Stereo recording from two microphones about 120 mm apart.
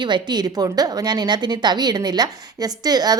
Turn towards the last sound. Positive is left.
turn(degrees=-35)  # may be behind; listen again after turning